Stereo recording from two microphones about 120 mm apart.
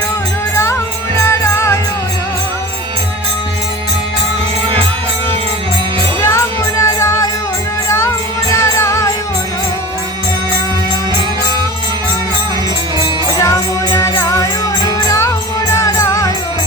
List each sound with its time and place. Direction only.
0.5 s music: 25° left (ahead or behind)
6.2 s music: 20° left (ahead or behind)
13.3 s music: 30° left (ahead or behind)